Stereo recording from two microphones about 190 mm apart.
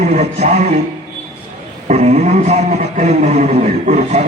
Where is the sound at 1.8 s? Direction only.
35° right (ahead or behind).